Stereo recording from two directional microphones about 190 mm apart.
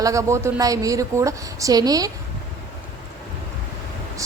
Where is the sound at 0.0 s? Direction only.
15° right (ahead or behind).